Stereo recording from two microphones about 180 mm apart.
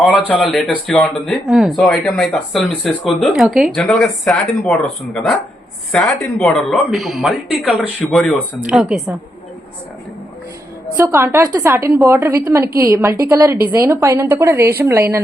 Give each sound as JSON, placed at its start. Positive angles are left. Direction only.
{"t": 0.0, "sound": "speech", "side_deg": 0}
{"t": 6.4, "sound": "speech", "side_deg": 0}
{"t": 10.9, "sound": "a woman's voice", "side_deg": -15}